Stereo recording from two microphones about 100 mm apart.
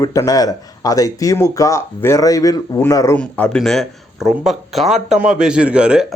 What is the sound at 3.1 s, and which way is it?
Speech, 15° left (ahead or behind).